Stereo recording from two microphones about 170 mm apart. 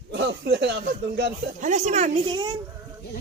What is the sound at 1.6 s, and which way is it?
Speech, 45° right (ahead or behind).